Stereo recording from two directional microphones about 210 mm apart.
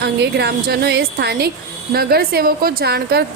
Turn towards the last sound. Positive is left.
turn(degrees=-50)  # may be behind; listen again after turning